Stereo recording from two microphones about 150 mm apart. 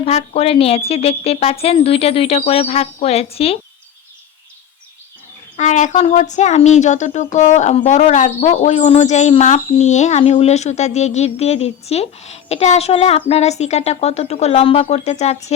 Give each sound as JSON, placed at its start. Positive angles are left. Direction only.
{"t": 0.0, "sound": "a woman's voice", "side_deg": 45}
{"t": 5.5, "sound": "speech", "side_deg": 55}